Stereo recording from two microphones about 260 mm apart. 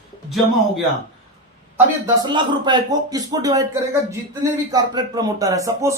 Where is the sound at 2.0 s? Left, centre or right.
Centre.